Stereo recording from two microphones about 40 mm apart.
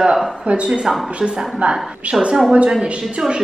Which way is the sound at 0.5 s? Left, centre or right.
Right.